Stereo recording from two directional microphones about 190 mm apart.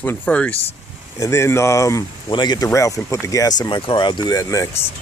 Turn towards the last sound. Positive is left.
turn(degrees=20)  # may be behind; listen again after turning